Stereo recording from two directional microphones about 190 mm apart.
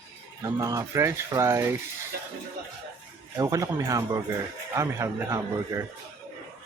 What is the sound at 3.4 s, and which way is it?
Speech, 15° right (ahead or behind).